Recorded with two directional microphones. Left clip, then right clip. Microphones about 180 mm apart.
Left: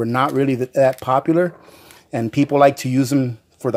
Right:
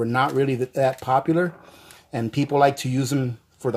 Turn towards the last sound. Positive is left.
turn(degrees=35)  # may be behind; listen again after turning